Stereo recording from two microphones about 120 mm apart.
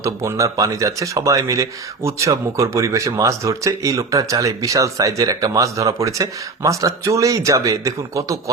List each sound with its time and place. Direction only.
0.0 s speech: 25° right (ahead or behind)